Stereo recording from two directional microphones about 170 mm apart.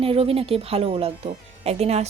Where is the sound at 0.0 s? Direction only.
35° right (ahead or behind).